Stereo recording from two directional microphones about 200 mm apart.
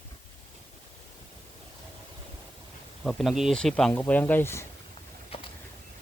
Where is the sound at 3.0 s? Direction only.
Centre (ahead or behind).